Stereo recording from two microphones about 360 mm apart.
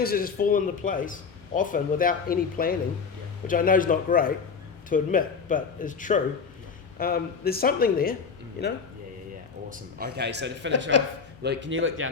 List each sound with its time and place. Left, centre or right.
0.0 s a man's voice: left
9.6 s a man's voice: right
10.9 s speech: left
11.4 s speech: right